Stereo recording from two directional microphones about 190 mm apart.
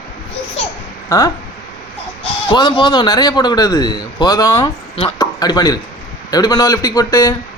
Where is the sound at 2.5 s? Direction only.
25° left (ahead or behind).